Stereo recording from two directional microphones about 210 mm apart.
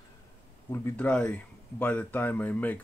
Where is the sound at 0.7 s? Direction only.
10° left (ahead or behind).